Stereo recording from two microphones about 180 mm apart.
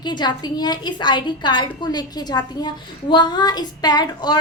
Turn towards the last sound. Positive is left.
turn(degrees=25)  # may be behind; listen again after turning